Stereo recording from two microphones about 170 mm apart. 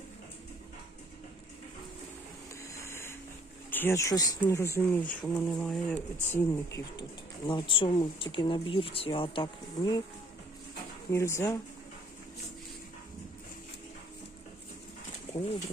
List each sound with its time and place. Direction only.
2.7 s a sound: 15° left (ahead or behind)
3.7 s speech: 10° left (ahead or behind)
5.2 s speech: 5° left (ahead or behind)
7.4 s speech: 30° left (ahead or behind)
11.1 s speech: 15° left (ahead or behind)